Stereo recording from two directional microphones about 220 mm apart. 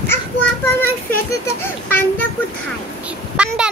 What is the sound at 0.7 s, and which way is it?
Speech, 10° left (ahead or behind).